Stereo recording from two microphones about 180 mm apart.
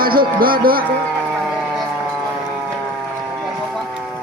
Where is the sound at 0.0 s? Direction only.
55° right (ahead or behind).